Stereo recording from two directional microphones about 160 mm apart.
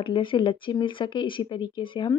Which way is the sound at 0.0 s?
30° left (ahead or behind).